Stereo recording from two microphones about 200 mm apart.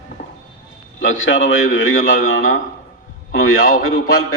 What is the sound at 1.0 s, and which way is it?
A man's voice, 75° left (ahead or behind).